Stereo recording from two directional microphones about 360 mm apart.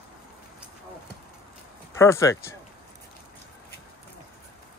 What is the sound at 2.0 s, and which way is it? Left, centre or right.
Speech, centre.